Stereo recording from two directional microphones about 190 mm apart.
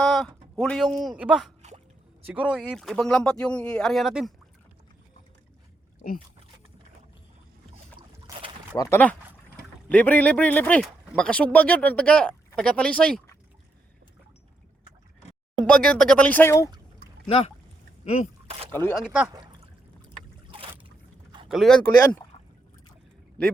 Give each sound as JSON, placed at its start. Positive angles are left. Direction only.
{"t": 0.0, "sound": "a sound", "side_deg": 0}
{"t": 1.0, "sound": "speech", "side_deg": -5}
{"t": 8.8, "sound": "speech", "side_deg": 10}
{"t": 15.6, "sound": "speech", "side_deg": 5}
{"t": 17.2, "sound": "speech", "side_deg": 30}
{"t": 18.7, "sound": "speech", "side_deg": 10}
{"t": 18.9, "sound": "speech", "side_deg": -5}
{"t": 21.5, "sound": "speech", "side_deg": 0}